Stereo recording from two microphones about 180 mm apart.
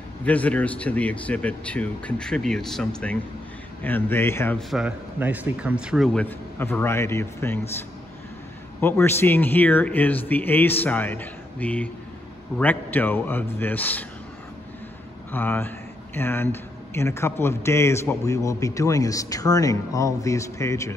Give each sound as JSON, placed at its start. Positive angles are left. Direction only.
{"t": 0.2, "sound": "a man's voice", "side_deg": 10}
{"t": 4.6, "sound": "speech", "side_deg": 0}
{"t": 8.8, "sound": "a man's voice", "side_deg": 10}
{"t": 15.3, "sound": "a man's voice", "side_deg": 10}